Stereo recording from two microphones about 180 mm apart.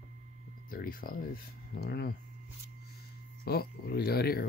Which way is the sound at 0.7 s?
55° left (ahead or behind).